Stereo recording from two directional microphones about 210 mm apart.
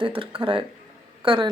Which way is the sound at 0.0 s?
25° right (ahead or behind).